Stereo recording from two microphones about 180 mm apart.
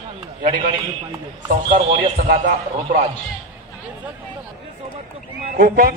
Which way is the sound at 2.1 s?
45° right (ahead or behind).